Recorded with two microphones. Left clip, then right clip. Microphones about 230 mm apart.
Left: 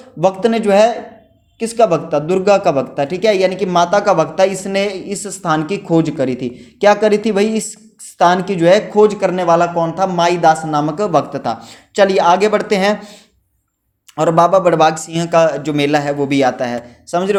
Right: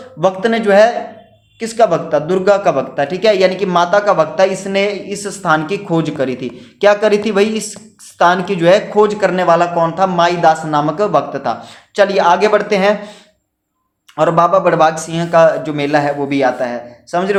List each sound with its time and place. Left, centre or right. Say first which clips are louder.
0.2 s a man's voice: even; left
14.2 s a man's voice: even; left